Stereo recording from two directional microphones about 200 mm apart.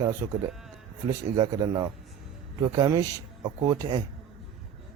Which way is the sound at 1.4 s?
20° right (ahead or behind).